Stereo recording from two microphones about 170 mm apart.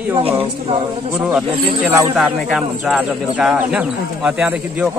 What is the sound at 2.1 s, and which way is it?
Speech, centre (ahead or behind).